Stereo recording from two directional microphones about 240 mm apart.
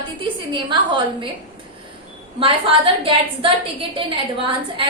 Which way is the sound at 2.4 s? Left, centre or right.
Right.